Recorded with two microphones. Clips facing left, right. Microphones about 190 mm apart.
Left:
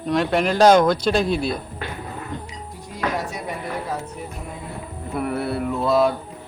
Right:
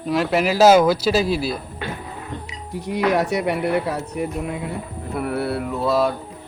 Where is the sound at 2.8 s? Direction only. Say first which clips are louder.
Right 7 dB; 70° right (ahead or behind).